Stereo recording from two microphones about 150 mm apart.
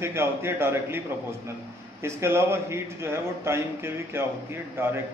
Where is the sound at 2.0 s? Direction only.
15° right (ahead or behind).